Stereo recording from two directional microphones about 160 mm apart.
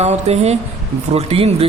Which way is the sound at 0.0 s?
40° right (ahead or behind).